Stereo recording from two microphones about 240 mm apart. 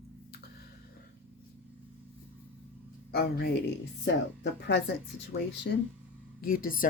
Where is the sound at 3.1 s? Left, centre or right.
Left.